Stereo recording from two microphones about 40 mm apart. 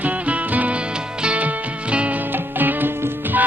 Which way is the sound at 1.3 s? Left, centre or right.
Right.